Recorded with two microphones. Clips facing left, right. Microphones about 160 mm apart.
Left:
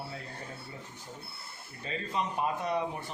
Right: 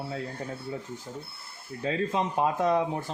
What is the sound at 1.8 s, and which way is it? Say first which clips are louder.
Speech: right 6 dB; 90° right.